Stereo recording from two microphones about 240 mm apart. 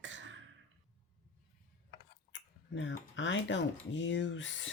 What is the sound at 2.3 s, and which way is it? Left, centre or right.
Speech, left.